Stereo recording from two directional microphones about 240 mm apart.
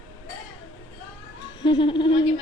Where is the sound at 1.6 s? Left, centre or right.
Left.